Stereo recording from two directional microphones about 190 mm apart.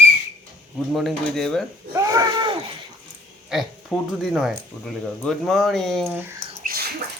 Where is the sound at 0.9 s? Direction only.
Centre (ahead or behind).